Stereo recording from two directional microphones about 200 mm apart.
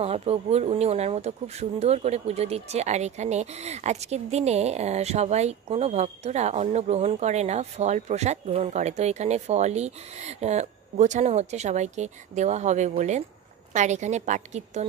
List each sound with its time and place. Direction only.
0.0 s speech: 30° right (ahead or behind)